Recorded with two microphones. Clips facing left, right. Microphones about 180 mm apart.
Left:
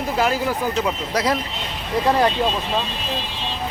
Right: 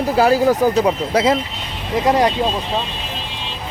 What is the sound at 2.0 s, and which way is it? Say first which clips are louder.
Speech: right 3 dB; 15° right (ahead or behind).